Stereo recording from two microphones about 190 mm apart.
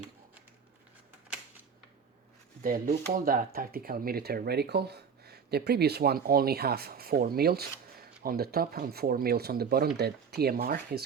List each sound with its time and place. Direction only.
2.6 s speech: 45° right (ahead or behind)